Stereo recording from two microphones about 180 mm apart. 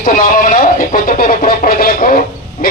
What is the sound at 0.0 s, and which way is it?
Speech, 50° left (ahead or behind).